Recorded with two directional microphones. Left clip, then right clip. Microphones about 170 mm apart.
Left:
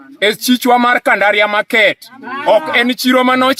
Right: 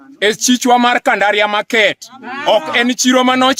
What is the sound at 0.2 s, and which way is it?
A man's voice, 35° right (ahead or behind).